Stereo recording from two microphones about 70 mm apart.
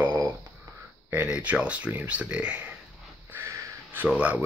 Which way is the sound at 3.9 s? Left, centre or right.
Right.